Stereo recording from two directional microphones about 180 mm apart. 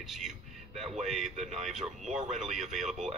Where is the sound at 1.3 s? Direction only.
40° right (ahead or behind).